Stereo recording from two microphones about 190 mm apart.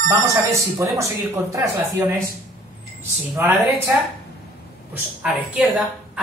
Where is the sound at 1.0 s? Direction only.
15° right (ahead or behind).